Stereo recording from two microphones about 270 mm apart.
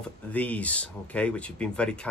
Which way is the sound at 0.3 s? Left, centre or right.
Centre.